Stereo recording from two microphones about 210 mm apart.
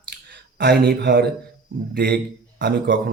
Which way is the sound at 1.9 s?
50° right (ahead or behind).